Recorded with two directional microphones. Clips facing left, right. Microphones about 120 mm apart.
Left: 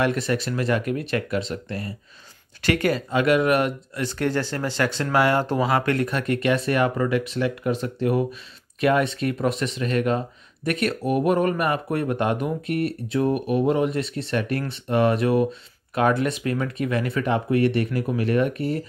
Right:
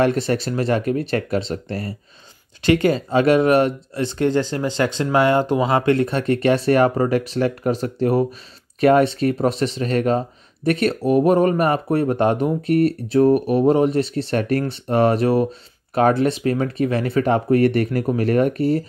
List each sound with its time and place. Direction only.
0.0 s speech: 35° right (ahead or behind)
2.6 s speech: 25° right (ahead or behind)